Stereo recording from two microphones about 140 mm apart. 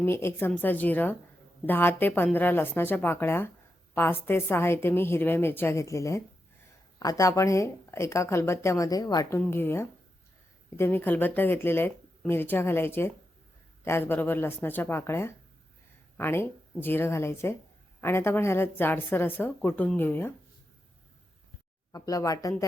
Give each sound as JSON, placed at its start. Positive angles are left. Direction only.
{"t": 0.0, "sound": "a woman's voice", "side_deg": 15}
{"t": 9.5, "sound": "speech", "side_deg": 15}
{"t": 21.9, "sound": "a woman's voice", "side_deg": 25}